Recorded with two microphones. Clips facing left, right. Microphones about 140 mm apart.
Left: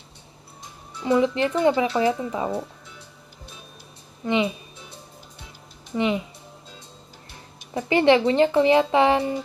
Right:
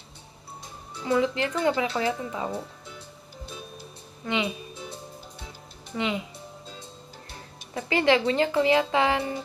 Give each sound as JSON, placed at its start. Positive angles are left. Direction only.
{"t": 1.0, "sound": "speech", "side_deg": 20}
{"t": 5.9, "sound": "speech", "side_deg": 25}
{"t": 7.7, "sound": "speech", "side_deg": 25}